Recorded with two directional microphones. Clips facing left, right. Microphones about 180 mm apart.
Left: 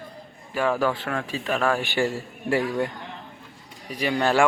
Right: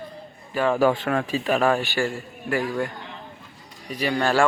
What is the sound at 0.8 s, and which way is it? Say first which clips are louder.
Speech: right 5 dB; 20° right (ahead or behind).